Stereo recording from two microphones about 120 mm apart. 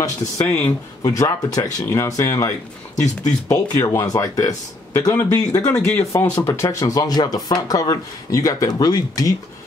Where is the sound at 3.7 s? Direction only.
30° left (ahead or behind).